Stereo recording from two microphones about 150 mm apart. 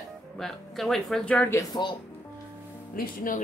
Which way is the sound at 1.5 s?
30° left (ahead or behind).